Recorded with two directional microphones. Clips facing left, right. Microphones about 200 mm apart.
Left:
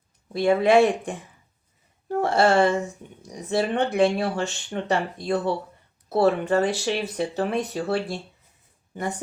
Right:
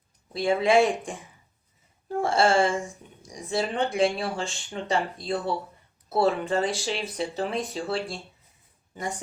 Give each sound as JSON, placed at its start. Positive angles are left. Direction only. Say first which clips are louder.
{"t": 0.6, "sound": "speech", "louder": "left 2 dB", "side_deg": 60}
{"t": 2.2, "sound": "speech", "louder": "left 3 dB", "side_deg": 65}
{"t": 3.2, "sound": "speech", "louder": "left 4 dB", "side_deg": 40}
{"t": 3.7, "sound": "speech", "louder": "left 3 dB", "side_deg": 60}
{"t": 9.0, "sound": "speech", "louder": "left 3 dB", "side_deg": 60}